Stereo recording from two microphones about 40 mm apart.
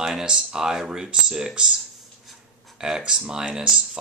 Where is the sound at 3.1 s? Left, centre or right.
Centre.